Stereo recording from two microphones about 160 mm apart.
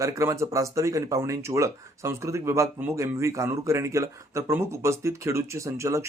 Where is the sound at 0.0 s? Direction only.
20° right (ahead or behind).